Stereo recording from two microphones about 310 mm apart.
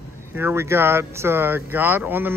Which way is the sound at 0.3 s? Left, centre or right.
Centre.